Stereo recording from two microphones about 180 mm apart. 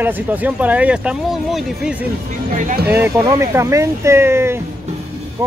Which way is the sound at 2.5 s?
50° right (ahead or behind).